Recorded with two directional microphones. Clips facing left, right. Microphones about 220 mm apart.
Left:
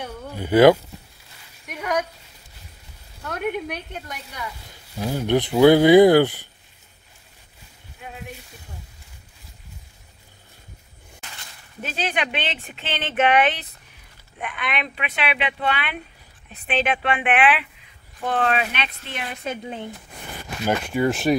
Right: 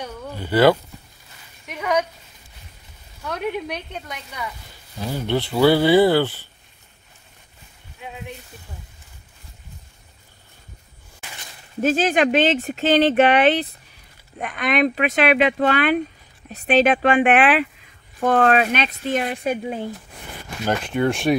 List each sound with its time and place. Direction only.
0.0 s speech: 15° left (ahead or behind)
1.7 s a sound: centre (ahead or behind)
3.3 s a woman's voice: 5° left (ahead or behind)
11.8 s speech: 45° right (ahead or behind)
19.4 s speech: 15° right (ahead or behind)
20.6 s a woman's voice: 5° left (ahead or behind)